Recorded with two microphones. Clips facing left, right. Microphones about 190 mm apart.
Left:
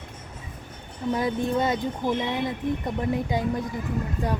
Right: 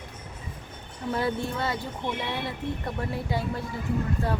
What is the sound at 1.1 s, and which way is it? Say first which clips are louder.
Speech: left 4 dB; 15° left (ahead or behind).